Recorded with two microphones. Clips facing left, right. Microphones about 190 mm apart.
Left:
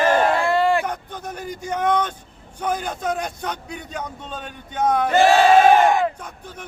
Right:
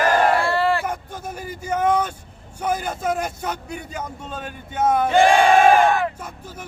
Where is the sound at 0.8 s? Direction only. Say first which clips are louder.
Even; 5° right (ahead or behind).